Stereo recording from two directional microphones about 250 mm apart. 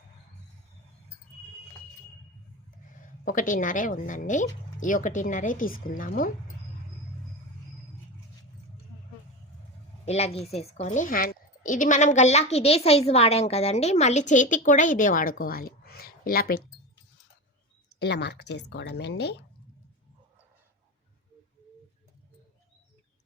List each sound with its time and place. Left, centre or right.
3.0 s speech: left
10.1 s a woman's voice: left
18.0 s speech: left